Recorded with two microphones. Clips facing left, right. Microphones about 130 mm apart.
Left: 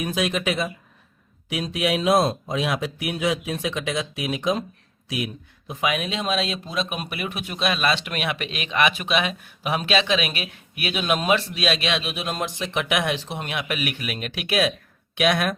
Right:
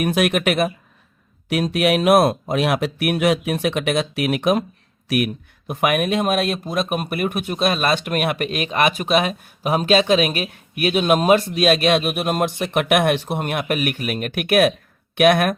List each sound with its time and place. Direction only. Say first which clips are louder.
0.0 s speech: right 6 dB; 65° right (ahead or behind)